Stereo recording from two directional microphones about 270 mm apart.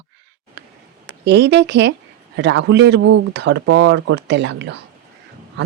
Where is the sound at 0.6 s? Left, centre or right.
Right.